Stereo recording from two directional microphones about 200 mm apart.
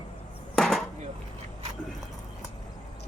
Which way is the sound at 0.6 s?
Centre (ahead or behind).